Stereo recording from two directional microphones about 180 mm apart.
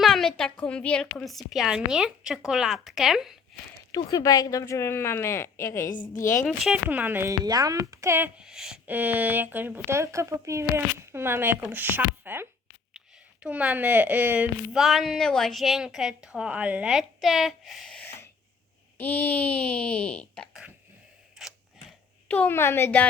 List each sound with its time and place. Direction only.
0.0 s a woman's voice: centre (ahead or behind)
3.9 s speech: 20° left (ahead or behind)
5.9 s a woman's voice: 45° left (ahead or behind)
6.4 s a woman's voice: centre (ahead or behind)
21.3 s a sound: centre (ahead or behind)
22.3 s speech: 10° left (ahead or behind)